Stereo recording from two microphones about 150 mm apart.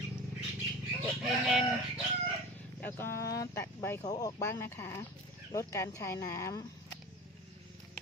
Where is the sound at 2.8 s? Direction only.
15° left (ahead or behind).